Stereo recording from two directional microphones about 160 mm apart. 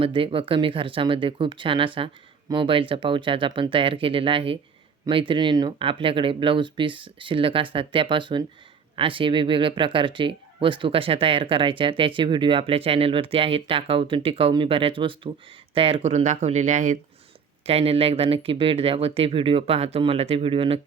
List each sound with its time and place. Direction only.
0.0 s speech: 35° right (ahead or behind); by 17.0 s 50° right (ahead or behind)
17.7 s speech: 40° right (ahead or behind)